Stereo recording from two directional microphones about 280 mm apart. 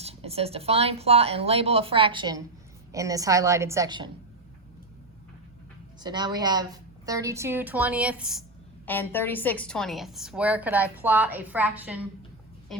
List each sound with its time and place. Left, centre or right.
0.0 s a woman's voice: right
6.0 s a woman's voice: centre